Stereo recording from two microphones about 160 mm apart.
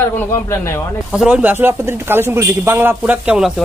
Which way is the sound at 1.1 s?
5° right (ahead or behind).